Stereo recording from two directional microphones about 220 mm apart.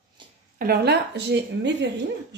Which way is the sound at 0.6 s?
45° right (ahead or behind).